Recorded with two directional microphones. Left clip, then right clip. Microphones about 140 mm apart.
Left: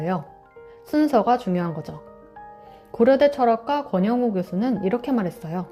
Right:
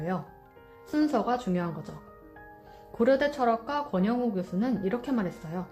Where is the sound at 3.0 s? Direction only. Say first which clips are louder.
Left 8 dB; 25° left (ahead or behind).